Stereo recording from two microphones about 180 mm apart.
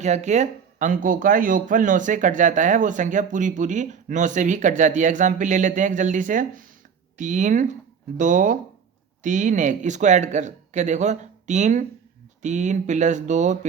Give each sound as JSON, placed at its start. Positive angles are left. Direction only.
{"t": 0.0, "sound": "speech", "side_deg": -40}